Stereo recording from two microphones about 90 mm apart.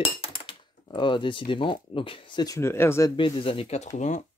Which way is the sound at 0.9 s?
65° left (ahead or behind).